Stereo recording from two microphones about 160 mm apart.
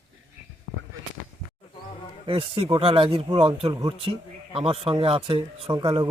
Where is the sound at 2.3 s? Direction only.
35° right (ahead or behind).